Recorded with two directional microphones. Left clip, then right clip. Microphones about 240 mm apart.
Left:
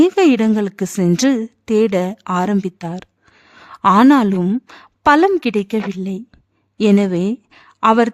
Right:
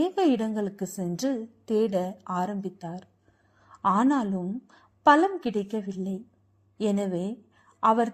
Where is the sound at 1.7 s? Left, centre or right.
Left.